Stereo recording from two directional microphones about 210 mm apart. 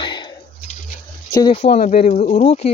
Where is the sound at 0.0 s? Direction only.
20° left (ahead or behind).